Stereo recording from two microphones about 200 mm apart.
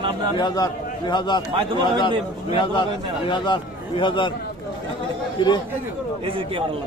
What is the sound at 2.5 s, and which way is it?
A man's voice, 25° left (ahead or behind).